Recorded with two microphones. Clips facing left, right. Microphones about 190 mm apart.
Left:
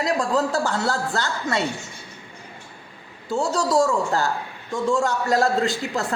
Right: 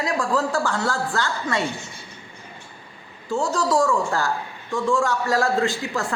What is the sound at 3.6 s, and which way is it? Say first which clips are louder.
Speech: left 1 dB; 25° left (ahead or behind).